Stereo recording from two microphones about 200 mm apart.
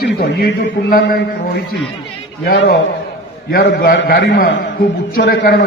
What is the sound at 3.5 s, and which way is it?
A man's voice, 50° left (ahead or behind).